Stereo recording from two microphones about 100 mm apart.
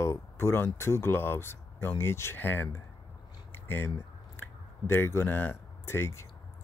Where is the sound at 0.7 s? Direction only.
25° left (ahead or behind).